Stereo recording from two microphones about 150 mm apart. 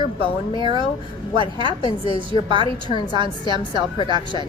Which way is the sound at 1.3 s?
30° right (ahead or behind).